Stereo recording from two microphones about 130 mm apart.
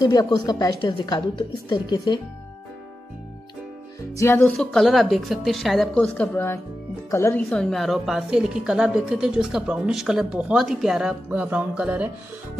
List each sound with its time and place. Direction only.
0.0 s speech: 30° left (ahead or behind)
4.1 s speech: 20° left (ahead or behind)
4.6 s a woman's voice: 5° left (ahead or behind)
6.1 s speech: 15° left (ahead or behind)
7.4 s a woman's voice: centre (ahead or behind)
11.2 s music: 10° right (ahead or behind)